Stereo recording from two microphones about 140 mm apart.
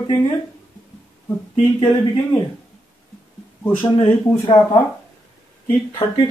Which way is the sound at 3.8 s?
35° left (ahead or behind).